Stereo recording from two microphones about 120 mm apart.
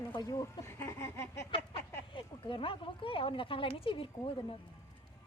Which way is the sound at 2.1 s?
45° left (ahead or behind).